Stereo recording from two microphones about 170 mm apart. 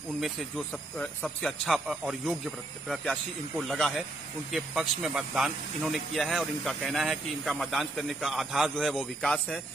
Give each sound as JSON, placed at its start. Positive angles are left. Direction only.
{"t": 0.2, "sound": "speech", "side_deg": 0}